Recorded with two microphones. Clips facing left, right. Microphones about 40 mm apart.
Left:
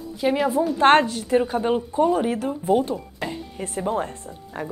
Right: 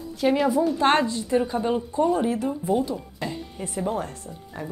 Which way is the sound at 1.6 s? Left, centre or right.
Left.